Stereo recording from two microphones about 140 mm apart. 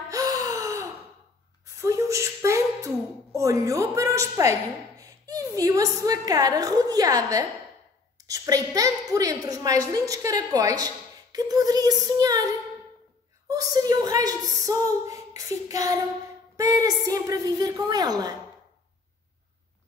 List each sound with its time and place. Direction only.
0.1 s gasp: 25° right (ahead or behind)
1.8 s a sound: 20° right (ahead or behind)
3.3 s a woman's voice: 20° right (ahead or behind)
13.5 s a woman's voice: 25° right (ahead or behind)